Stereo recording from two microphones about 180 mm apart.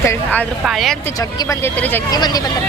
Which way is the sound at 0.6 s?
Centre (ahead or behind).